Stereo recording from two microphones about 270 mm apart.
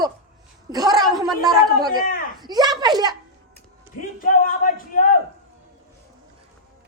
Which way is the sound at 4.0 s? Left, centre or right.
Left.